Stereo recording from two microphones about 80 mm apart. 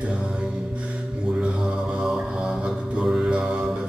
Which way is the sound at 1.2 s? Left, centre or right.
Centre.